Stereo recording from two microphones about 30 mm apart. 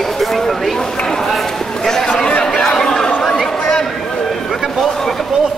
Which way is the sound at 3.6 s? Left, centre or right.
Centre.